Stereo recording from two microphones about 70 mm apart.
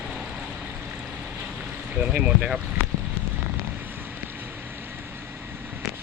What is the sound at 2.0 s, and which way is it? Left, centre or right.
Speech, centre.